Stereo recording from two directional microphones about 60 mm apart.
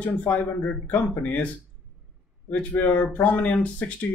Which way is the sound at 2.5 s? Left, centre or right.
Left.